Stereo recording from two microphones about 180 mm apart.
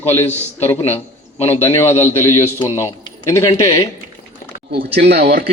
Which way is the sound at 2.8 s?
15° left (ahead or behind).